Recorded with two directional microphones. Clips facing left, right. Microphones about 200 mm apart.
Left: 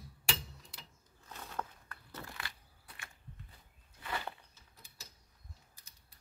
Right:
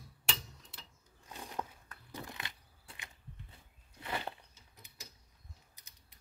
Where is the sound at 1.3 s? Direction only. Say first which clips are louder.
Right 1 dB; 15° right (ahead or behind).